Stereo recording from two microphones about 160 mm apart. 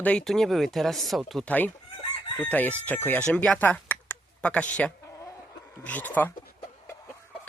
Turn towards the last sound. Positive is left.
turn(degrees=10)  # may be behind; listen again after turning